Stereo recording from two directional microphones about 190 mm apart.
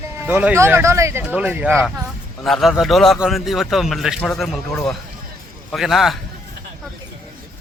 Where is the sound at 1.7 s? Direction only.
5° left (ahead or behind).